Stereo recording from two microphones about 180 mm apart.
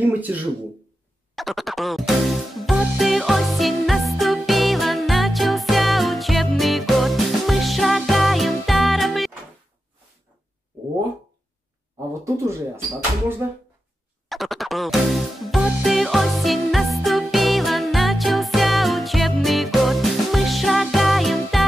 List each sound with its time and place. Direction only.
0.3 s speech: 10° right (ahead or behind)
1.3 s music: centre (ahead or behind)
12.1 s speech: 15° right (ahead or behind)
14.3 s music: centre (ahead or behind)